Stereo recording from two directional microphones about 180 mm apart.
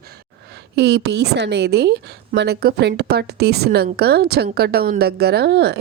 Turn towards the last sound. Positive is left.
turn(degrees=-70)  # may be behind; listen again after turning